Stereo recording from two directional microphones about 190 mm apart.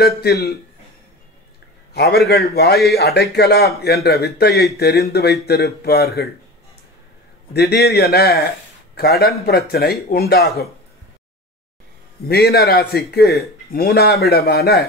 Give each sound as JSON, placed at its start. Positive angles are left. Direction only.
{"t": 0.0, "sound": "a man's voice", "side_deg": 55}
{"t": 2.0, "sound": "a man's voice", "side_deg": 60}
{"t": 7.5, "sound": "a man's voice", "side_deg": 55}
{"t": 12.3, "sound": "a man's voice", "side_deg": 55}